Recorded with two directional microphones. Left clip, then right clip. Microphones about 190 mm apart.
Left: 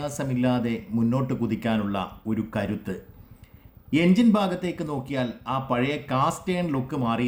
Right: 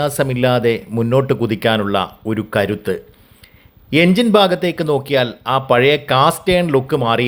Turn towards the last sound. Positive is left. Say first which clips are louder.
# right 12 dB
turn(degrees=-35)  # may be behind; listen again after turning